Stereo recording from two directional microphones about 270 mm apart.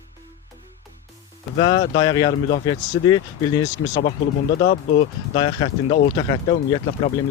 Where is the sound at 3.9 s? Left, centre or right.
Left.